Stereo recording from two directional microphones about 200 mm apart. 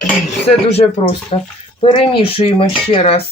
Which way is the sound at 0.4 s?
30° left (ahead or behind).